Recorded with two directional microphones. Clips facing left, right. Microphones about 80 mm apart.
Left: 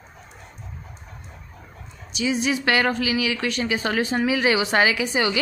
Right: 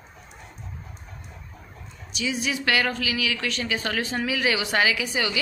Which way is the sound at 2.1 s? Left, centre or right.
Left.